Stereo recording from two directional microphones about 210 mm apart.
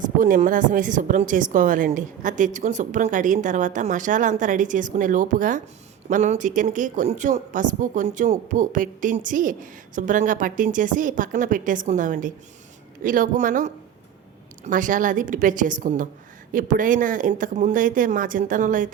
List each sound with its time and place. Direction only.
0.0 s speech: 40° right (ahead or behind)